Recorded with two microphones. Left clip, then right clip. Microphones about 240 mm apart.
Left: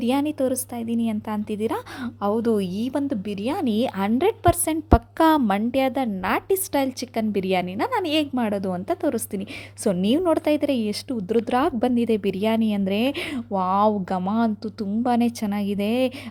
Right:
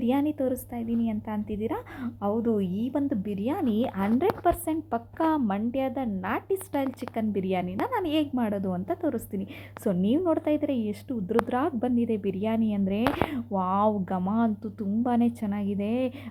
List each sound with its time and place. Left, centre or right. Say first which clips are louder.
0.0 s a woman's voice: left 4 dB; left
3.1 s a woman's voice: left 3 dB; left
3.8 s a woman's voice: left 4 dB; left